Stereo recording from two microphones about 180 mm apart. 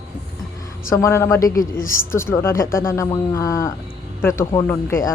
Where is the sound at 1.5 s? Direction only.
50° left (ahead or behind).